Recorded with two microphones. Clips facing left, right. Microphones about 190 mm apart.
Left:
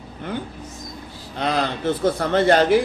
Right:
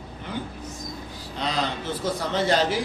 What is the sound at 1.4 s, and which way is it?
A man's voice, 55° left (ahead or behind).